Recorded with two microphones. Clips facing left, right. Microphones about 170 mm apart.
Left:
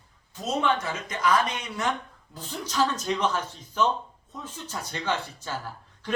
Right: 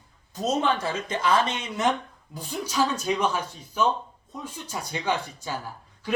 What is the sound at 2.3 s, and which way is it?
Speech, 10° right (ahead or behind).